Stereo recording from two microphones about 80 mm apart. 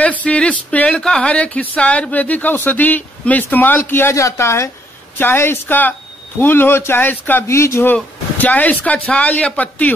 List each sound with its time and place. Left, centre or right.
0.0 s speech: centre
7.4 s speech: left
7.9 s speech: centre